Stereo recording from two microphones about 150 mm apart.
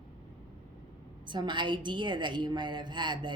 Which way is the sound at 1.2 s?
30° right (ahead or behind).